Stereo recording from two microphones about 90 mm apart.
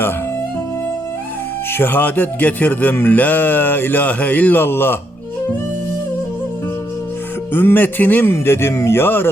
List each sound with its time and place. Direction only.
1.7 s a man's voice: 20° left (ahead or behind)
7.5 s a man's voice: 20° left (ahead or behind)